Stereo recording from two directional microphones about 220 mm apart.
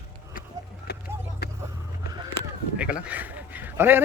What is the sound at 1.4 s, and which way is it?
Vehicle, 45° left (ahead or behind).